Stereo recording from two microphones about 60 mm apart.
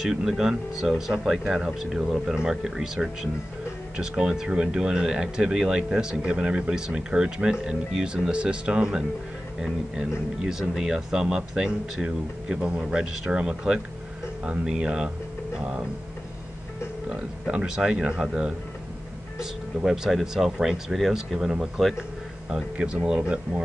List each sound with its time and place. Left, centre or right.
0.0 s speech: centre
10.4 s speech: centre
17.1 s speech: centre
19.8 s speech: centre
22.5 s speech: centre